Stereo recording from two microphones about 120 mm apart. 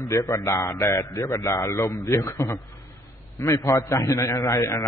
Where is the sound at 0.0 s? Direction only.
25° left (ahead or behind).